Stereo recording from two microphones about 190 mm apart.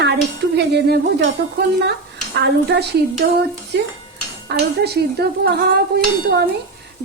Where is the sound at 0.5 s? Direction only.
60° right (ahead or behind).